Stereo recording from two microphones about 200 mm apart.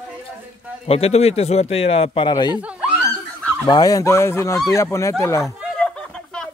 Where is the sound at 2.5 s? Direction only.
5° right (ahead or behind).